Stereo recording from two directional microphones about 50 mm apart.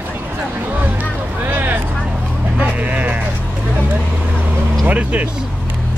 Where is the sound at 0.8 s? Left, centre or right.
Right.